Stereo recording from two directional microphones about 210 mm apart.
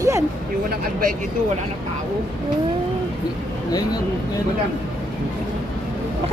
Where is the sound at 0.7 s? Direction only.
40° right (ahead or behind).